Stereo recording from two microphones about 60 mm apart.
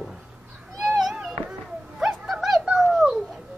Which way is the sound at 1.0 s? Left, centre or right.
Centre.